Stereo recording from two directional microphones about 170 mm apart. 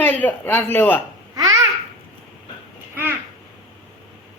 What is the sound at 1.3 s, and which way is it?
Babbling, 20° right (ahead or behind).